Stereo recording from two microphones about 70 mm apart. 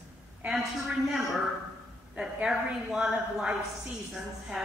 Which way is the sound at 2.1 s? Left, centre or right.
Centre.